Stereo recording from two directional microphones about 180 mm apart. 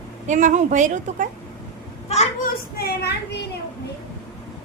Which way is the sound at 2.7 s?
60° left (ahead or behind).